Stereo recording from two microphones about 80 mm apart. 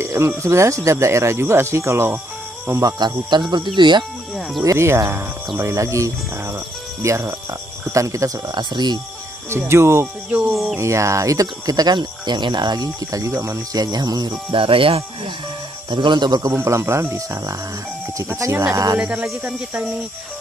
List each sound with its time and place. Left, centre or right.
0.0 s a sound: right
0.4 s speech: right
3.0 s speech: right
4.6 s speech: right
8.5 s speech: right
9.5 s speech: right
10.5 s a sound: centre
10.8 s speech: right
13.7 s speech: right
14.5 s speech: right
15.9 s speech: right
16.6 s speech: right
18.9 s speech: centre